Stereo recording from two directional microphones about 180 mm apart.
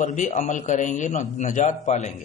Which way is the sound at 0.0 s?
45° left (ahead or behind).